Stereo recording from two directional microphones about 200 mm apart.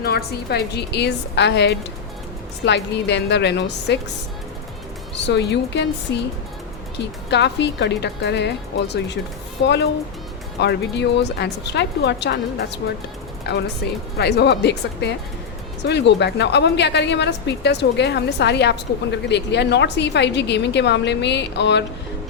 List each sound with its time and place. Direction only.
0.0 s a woman's voice: 50° left (ahead or behind)
5.1 s a woman's voice: 60° left (ahead or behind)
7.3 s a woman's voice: 60° left (ahead or behind)